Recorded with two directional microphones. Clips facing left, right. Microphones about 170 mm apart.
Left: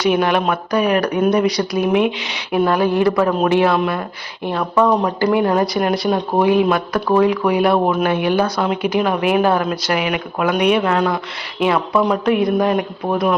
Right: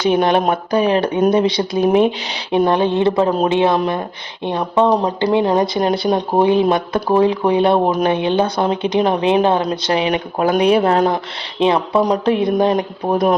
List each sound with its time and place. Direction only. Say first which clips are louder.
0.0 s speech: right 2 dB; 30° right (ahead or behind)
11.6 s speech: right 2 dB; 25° right (ahead or behind)